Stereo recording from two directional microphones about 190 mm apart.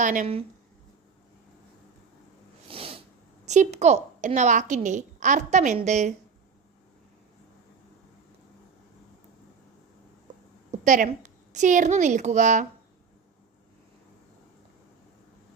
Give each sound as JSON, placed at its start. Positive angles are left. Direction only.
{"t": 0.0, "sound": "speech", "side_deg": -45}
{"t": 2.6, "sound": "sneeze", "side_deg": -30}
{"t": 3.4, "sound": "a woman's voice", "side_deg": -35}
{"t": 10.7, "sound": "a woman's voice", "side_deg": -45}